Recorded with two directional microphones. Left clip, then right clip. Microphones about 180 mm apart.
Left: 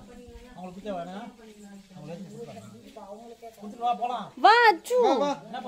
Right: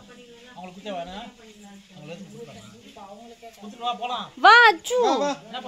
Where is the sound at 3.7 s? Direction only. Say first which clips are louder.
Even; 50° left (ahead or behind).